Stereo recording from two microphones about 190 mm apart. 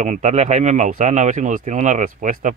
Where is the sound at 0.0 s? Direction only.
40° right (ahead or behind).